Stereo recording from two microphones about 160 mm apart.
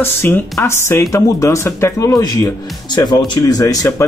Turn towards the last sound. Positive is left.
turn(degrees=20)  # may be behind; listen again after turning